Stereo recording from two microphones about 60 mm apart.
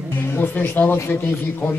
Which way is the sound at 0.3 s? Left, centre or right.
Left.